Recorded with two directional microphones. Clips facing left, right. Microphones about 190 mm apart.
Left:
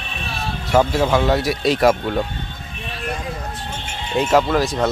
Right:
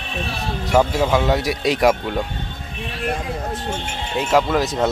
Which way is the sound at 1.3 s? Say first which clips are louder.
Left 1 dB; 15° right (ahead or behind).